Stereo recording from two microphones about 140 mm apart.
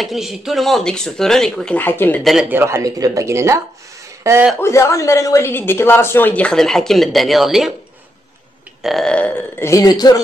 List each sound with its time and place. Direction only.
0.0 s speech: centre (ahead or behind); by 2.2 s 15° left (ahead or behind)
2.5 s speech: 20° right (ahead or behind)
4.6 s a woman's voice: 20° left (ahead or behind); by 7.7 s centre (ahead or behind)
8.8 s a woman's voice: 5° left (ahead or behind); by 10.2 s 25° left (ahead or behind)